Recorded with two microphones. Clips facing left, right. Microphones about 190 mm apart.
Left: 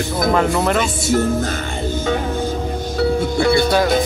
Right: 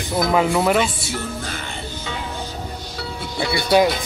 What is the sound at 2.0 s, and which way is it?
Music, 50° left (ahead or behind).